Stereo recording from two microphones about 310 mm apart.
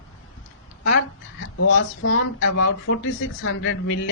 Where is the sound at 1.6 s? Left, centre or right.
Left.